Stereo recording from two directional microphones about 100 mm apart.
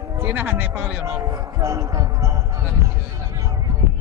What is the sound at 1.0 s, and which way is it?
Speech, 30° right (ahead or behind).